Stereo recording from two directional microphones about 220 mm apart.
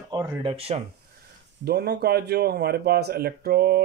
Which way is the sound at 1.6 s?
50° right (ahead or behind).